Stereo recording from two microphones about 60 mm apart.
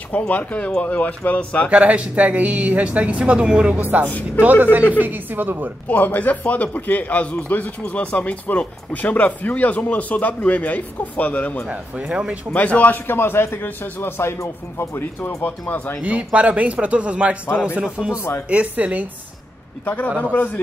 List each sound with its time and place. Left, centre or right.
0.3 s a man's voice: left
1.7 s a woman's voice: right
5.9 s a man's voice: left
11.7 s speech: right
12.5 s a man's voice: left
16.0 s speech: right
17.5 s a man's voice: left
17.7 s speech: centre
19.8 s a man's voice: left